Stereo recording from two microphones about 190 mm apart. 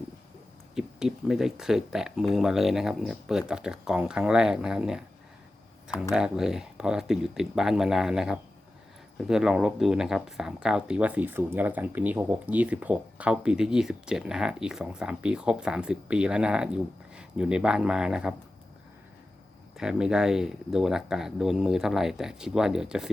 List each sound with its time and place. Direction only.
0.8 s speech: 5° right (ahead or behind)
19.7 s speech: 5° right (ahead or behind)